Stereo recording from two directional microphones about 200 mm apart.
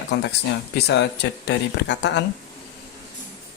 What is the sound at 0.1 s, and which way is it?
Speech, 55° left (ahead or behind).